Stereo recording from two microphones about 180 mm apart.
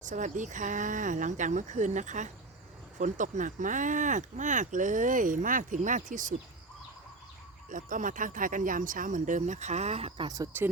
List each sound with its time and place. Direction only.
0.0 s speech: 45° right (ahead or behind)
7.7 s speech: 45° right (ahead or behind)
10.2 s speech: 20° right (ahead or behind)